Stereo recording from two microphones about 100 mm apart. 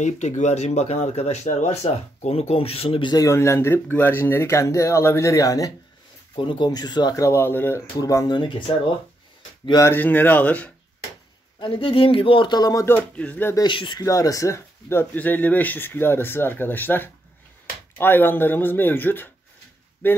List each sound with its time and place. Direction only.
0.5 s speech: 90° left; by 3.1 s 70° left (ahead or behind)
3.1 s speech: 35° left (ahead or behind)
6.3 s speech: 55° left (ahead or behind)
6.7 s speech: 45° left (ahead or behind); by 7.8 s 20° left (ahead or behind)
8.0 s speech: 35° left (ahead or behind)
8.3 s speech: 50° left (ahead or behind)
9.8 s speech: 20° left (ahead or behind)
11.6 s speech: 65° left (ahead or behind); by 12.8 s 40° left (ahead or behind)
12.8 s speech: 15° left (ahead or behind)
13.7 s speech: 50° left (ahead or behind)
14.0 s speech: 35° left (ahead or behind)